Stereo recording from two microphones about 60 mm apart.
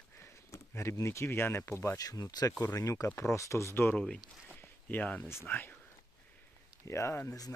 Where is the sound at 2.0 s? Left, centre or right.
Left.